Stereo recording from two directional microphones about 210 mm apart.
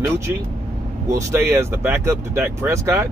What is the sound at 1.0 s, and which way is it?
Speech, 15° right (ahead or behind).